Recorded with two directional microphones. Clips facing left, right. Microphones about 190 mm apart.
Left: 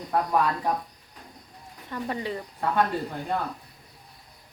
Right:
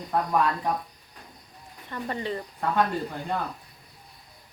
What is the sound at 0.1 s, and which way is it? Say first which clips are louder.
Speech: even; 5° left (ahead or behind).